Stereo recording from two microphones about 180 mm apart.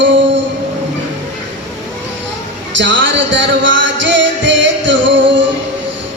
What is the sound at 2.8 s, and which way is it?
Music, 90° right.